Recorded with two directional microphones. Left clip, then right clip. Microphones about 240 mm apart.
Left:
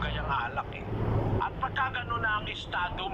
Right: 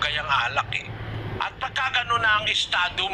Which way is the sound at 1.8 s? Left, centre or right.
Right.